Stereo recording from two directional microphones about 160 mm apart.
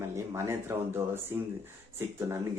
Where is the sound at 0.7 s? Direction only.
15° right (ahead or behind).